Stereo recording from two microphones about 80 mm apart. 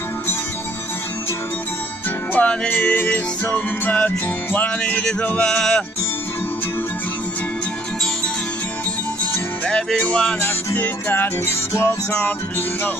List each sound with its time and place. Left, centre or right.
2.3 s speech: centre
2.7 s music: centre
5.2 s speech: centre
9.7 s music: centre
10.4 s music: left